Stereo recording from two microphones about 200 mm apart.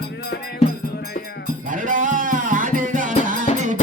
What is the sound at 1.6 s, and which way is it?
Music, 40° right (ahead or behind).